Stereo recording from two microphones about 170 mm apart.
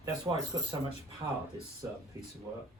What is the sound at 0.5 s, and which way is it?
Speech, 25° right (ahead or behind).